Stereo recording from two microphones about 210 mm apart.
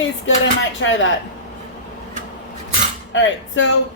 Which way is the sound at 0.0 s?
65° left (ahead or behind).